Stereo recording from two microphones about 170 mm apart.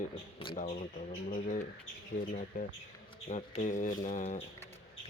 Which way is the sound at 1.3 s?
50° left (ahead or behind).